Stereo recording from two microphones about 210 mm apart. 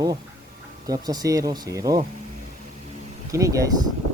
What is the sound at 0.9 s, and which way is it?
Speech, 20° right (ahead or behind).